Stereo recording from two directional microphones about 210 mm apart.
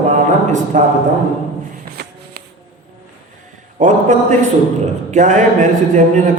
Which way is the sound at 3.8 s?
35° right (ahead or behind).